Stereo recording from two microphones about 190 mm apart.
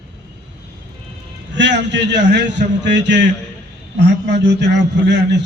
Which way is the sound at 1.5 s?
70° right (ahead or behind).